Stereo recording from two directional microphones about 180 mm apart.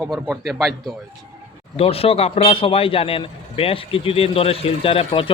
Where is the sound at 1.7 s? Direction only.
35° left (ahead or behind).